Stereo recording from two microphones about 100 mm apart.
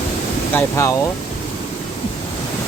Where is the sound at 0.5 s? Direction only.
30° left (ahead or behind).